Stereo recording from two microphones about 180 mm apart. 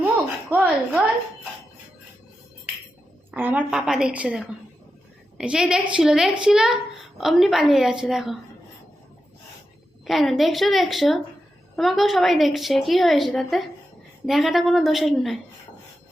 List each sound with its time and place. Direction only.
0.5 s a woman's voice: 10° right (ahead or behind)
3.3 s a woman's voice: 10° right (ahead or behind)
10.1 s a woman's voice: centre (ahead or behind)